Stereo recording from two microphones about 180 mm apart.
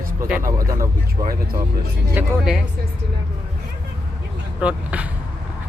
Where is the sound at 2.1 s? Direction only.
5° right (ahead or behind).